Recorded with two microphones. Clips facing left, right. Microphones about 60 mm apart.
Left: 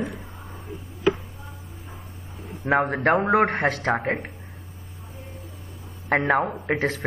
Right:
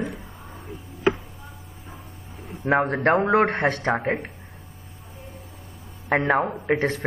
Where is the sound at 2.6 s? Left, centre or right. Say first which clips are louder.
Even; centre.